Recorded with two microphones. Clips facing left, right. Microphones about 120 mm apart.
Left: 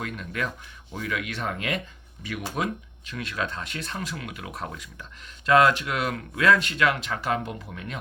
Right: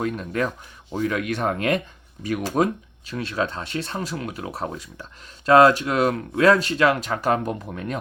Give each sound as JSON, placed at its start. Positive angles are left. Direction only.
{"t": 0.0, "sound": "speech", "side_deg": -35}